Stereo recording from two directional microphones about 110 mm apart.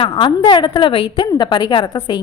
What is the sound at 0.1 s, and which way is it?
A woman's voice, 45° left (ahead or behind).